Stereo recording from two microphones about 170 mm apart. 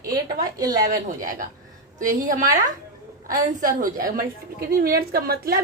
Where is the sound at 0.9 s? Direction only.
55° right (ahead or behind).